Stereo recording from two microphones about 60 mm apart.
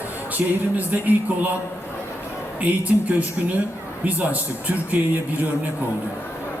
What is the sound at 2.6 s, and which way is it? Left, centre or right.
A man's voice, right.